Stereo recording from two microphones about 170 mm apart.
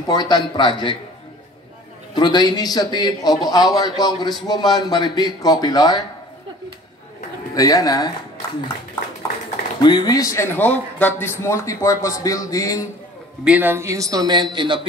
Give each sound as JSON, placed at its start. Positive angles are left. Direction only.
{"t": 0.0, "sound": "a man's voice", "side_deg": 25}
{"t": 2.1, "sound": "a man's voice", "side_deg": 25}
{"t": 7.5, "sound": "a man's voice", "side_deg": 20}
{"t": 9.8, "sound": "a man's voice", "side_deg": 25}
{"t": 13.4, "sound": "speech", "side_deg": -10}